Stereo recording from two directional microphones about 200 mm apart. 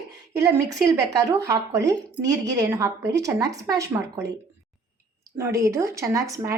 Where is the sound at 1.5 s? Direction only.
15° right (ahead or behind).